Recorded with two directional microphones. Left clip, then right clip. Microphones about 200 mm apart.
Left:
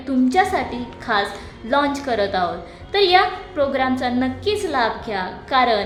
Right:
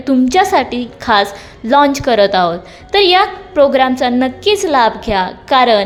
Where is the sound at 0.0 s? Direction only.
45° right (ahead or behind).